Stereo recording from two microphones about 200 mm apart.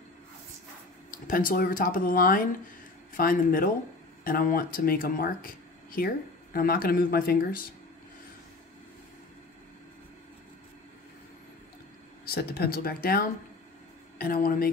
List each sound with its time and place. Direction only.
1.1 s speech: 45° left (ahead or behind)
12.3 s speech: 50° left (ahead or behind)